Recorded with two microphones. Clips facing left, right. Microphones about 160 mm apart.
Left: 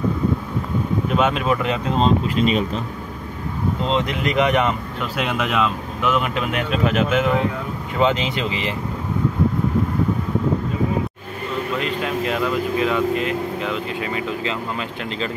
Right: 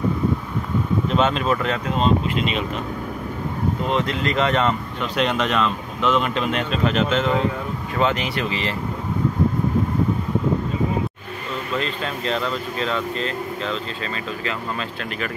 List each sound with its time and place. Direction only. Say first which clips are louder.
1.1 s speech: left 1 dB; 10° left (ahead or behind)
2.0 s speech: left 2 dB; 35° left (ahead or behind)
3.8 s speech: left 2 dB; 20° left (ahead or behind)
11.8 s speech: left 3 dB; 10° left (ahead or behind)